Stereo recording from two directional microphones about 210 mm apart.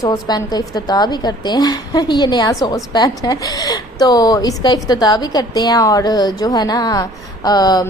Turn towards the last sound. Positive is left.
turn(degrees=20)  # may be behind; listen again after turning